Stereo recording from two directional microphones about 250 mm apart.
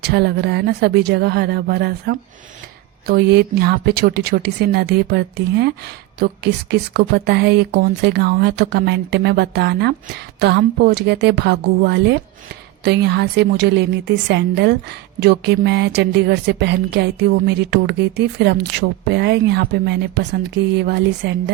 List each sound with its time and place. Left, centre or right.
0.0 s a woman's voice: right